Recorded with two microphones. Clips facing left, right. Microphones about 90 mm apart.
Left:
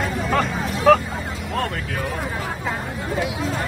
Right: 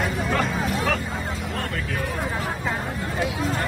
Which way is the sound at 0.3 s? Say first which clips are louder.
Left 3 dB; 40° left (ahead or behind).